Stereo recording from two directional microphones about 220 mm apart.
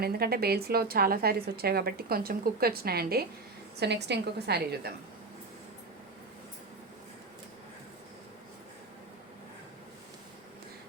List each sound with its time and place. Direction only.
0.0 s a woman's voice: 45° right (ahead or behind)